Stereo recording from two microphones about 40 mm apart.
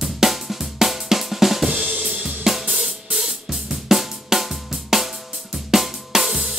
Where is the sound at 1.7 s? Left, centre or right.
Right.